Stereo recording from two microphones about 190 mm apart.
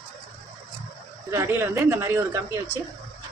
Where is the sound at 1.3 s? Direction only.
10° right (ahead or behind).